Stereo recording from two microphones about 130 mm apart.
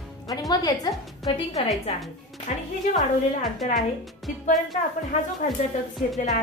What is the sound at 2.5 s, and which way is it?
Speech, 65° left (ahead or behind).